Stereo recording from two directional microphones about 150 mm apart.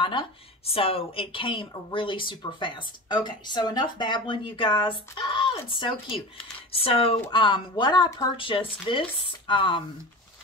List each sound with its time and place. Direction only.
0.0 s speech: 35° left (ahead or behind)